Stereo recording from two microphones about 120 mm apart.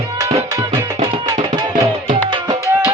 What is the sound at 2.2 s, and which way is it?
Music, 40° right (ahead or behind).